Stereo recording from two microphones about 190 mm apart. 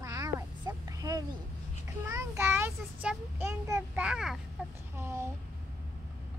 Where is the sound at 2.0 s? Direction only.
15° right (ahead or behind).